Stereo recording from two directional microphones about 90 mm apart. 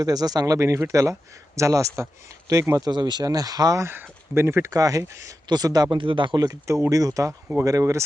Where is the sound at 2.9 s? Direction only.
55° right (ahead or behind).